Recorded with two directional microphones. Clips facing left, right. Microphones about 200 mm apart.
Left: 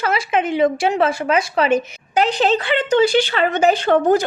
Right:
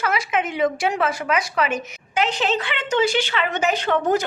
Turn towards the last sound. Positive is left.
turn(degrees=35)  # may be behind; listen again after turning